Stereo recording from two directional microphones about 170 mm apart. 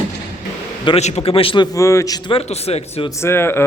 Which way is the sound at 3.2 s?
15° left (ahead or behind).